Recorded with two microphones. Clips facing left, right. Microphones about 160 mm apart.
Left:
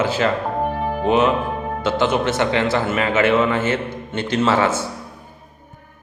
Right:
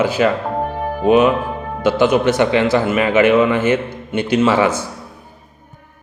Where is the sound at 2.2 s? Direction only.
15° right (ahead or behind).